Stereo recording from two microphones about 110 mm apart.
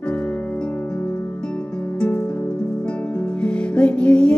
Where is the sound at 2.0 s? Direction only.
15° left (ahead or behind).